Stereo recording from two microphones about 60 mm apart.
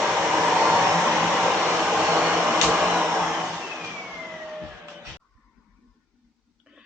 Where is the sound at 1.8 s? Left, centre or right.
Centre.